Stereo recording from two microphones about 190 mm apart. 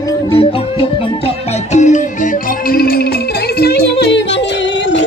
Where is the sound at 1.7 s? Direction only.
40° left (ahead or behind).